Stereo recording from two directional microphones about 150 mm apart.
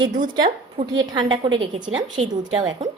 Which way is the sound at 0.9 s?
30° right (ahead or behind).